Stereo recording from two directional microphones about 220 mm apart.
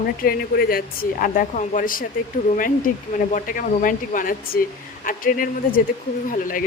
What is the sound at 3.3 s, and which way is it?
A woman's voice, 40° left (ahead or behind).